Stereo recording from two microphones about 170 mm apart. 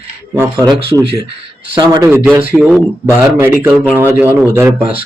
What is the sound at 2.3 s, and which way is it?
Speech, 10° right (ahead or behind).